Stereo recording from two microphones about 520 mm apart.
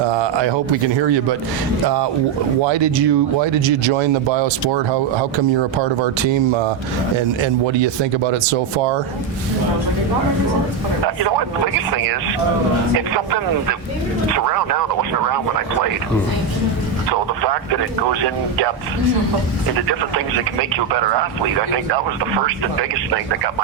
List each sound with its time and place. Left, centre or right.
0.1 s a man's voice: right
2.6 s speech: right
7.4 s speech: right
17.1 s speech: right